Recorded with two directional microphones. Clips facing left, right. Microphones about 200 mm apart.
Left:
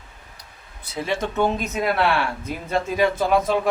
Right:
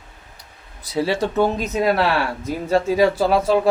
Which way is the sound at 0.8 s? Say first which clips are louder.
Right 5 dB; 35° right (ahead or behind).